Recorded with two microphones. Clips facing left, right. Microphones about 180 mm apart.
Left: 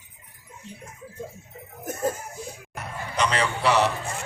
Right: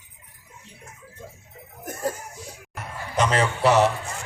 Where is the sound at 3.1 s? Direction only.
45° right (ahead or behind).